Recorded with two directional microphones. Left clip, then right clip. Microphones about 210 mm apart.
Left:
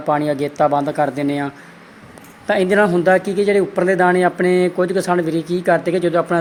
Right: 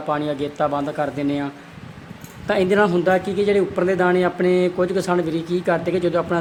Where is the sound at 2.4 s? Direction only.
5° left (ahead or behind).